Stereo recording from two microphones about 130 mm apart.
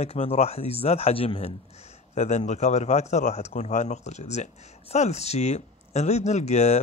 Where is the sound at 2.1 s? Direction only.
60° left (ahead or behind).